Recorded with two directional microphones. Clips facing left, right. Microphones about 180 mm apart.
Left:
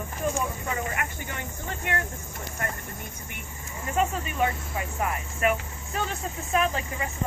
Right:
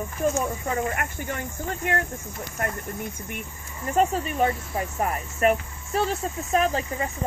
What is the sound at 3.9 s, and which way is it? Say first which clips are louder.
Speech: right 4 dB; 40° right (ahead or behind).